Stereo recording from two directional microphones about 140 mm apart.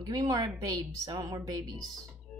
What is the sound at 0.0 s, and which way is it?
Speech, 25° right (ahead or behind).